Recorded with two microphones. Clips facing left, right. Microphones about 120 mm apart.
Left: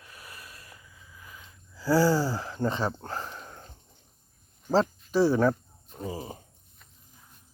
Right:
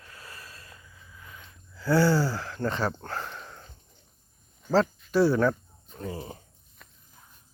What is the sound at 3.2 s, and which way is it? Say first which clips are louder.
Sniff: right 1 dB; 35° left (ahead or behind).